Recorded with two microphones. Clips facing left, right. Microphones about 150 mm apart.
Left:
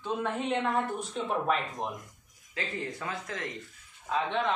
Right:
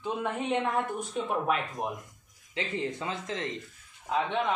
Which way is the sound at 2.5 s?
20° right (ahead or behind).